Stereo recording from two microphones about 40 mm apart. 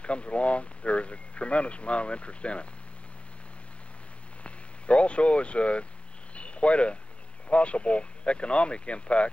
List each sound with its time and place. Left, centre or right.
0.0 s speech: left
4.4 s speech: left
6.3 s a sound: left
7.4 s speech: left